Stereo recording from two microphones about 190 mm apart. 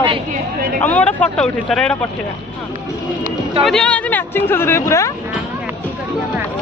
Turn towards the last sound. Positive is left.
turn(degrees=15)  # may be behind; listen again after turning